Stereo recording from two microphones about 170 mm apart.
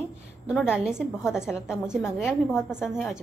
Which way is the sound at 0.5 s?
5° right (ahead or behind).